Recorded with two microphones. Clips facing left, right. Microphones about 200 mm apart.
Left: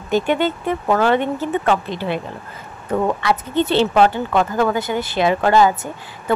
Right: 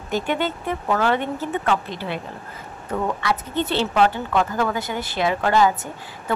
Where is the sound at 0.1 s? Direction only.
25° left (ahead or behind).